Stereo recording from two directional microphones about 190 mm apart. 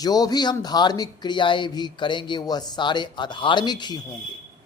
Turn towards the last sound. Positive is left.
turn(degrees=20)  # may be behind; listen again after turning